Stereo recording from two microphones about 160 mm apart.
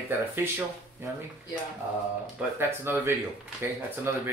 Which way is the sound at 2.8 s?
15° right (ahead or behind).